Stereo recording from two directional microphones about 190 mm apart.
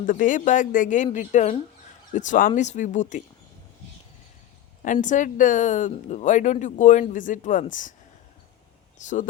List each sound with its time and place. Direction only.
0.0 s speech: 45° left (ahead or behind)
4.8 s a woman's voice: 45° left (ahead or behind)
9.0 s speech: 40° left (ahead or behind)